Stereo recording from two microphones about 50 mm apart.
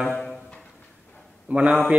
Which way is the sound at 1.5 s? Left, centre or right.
Right.